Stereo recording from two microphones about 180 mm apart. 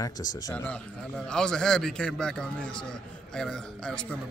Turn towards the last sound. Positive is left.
turn(degrees=5)  # may be behind; listen again after turning